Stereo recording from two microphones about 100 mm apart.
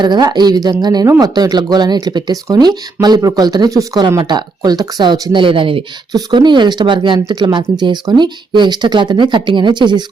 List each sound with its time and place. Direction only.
0.0 s speech: 45° right (ahead or behind)
5.4 s speech: 60° right (ahead or behind)
6.1 s speech: 45° right (ahead or behind)